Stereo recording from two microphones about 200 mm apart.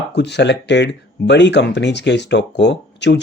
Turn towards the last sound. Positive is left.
turn(degrees=60)  # may be behind; listen again after turning